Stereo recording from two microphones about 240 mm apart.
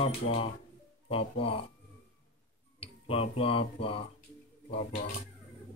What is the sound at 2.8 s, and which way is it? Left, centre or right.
Speech, left.